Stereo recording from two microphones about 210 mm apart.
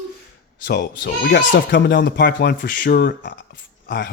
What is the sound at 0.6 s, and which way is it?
Speech, 50° left (ahead or behind).